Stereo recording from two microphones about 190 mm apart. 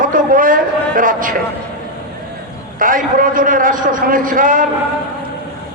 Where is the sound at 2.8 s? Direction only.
45° right (ahead or behind).